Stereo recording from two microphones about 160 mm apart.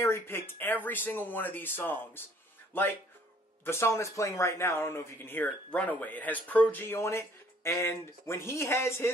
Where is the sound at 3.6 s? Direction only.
15° left (ahead or behind).